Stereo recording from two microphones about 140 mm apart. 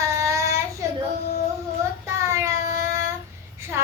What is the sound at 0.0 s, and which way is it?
Child singing, 20° right (ahead or behind).